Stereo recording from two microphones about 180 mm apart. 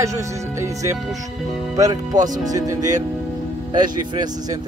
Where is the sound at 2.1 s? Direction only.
45° right (ahead or behind).